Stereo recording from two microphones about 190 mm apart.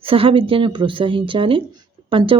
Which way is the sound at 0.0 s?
30° right (ahead or behind).